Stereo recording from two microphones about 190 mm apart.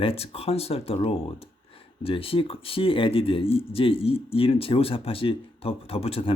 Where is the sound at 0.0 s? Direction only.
30° left (ahead or behind).